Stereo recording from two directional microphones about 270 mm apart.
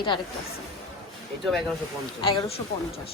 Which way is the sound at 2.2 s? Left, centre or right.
Centre.